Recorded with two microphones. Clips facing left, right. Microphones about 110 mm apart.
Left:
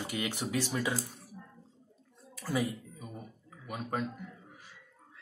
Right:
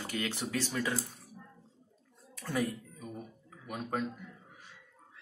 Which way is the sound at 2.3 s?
5° left (ahead or behind).